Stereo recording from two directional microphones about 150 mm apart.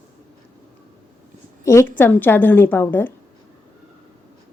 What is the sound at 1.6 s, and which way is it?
A woman's voice, 20° left (ahead or behind).